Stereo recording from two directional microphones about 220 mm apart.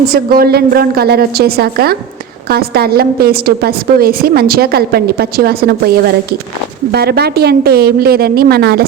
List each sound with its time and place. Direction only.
0.1 s a woman's voice: 45° right (ahead or behind)
6.9 s a woman's voice: 45° right (ahead or behind)